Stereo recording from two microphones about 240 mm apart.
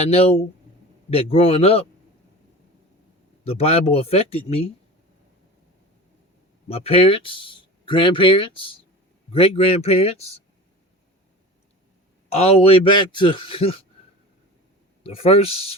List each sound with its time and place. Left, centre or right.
0.0 s speech: left
3.4 s speech: left
6.7 s speech: left
12.3 s speech: left
15.0 s speech: left